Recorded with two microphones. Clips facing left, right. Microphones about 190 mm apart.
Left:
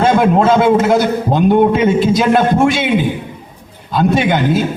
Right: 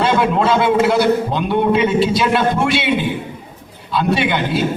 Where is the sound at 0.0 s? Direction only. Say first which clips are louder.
Left 4 dB; 45° left (ahead or behind).